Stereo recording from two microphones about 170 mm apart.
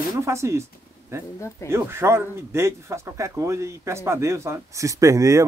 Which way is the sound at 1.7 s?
15° right (ahead or behind).